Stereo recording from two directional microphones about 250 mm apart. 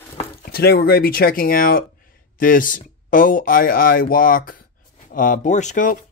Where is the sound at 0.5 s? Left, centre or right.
Left.